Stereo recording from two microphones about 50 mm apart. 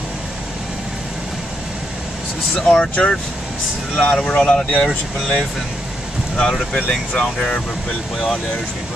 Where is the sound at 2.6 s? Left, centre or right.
Left.